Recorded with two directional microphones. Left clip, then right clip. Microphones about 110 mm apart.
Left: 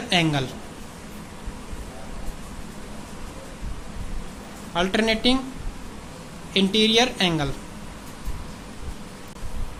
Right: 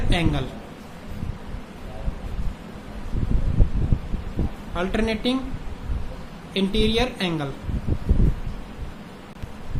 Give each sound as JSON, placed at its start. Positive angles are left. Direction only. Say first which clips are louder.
{"t": 0.1, "sound": "a woman's voice", "louder": "left 4 dB", "side_deg": 35}
{"t": 4.7, "sound": "a woman's voice", "louder": "left 4 dB", "side_deg": 30}
{"t": 6.5, "sound": "a woman's voice", "louder": "left 3 dB", "side_deg": 35}